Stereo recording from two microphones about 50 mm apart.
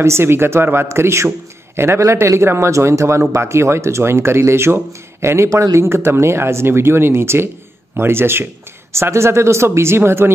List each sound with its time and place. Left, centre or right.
0.0 s a man's voice: right
8.9 s a man's voice: right